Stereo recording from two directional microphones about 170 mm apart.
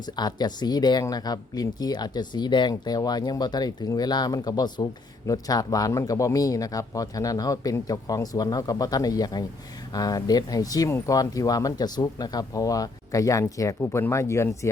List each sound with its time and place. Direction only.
0.0 s speech: 25° left (ahead or behind)